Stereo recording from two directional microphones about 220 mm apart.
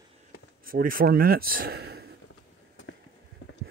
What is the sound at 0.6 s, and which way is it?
Speech, 40° right (ahead or behind).